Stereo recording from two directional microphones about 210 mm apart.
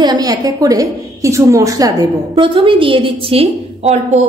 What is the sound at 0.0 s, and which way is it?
A woman's voice, 20° right (ahead or behind).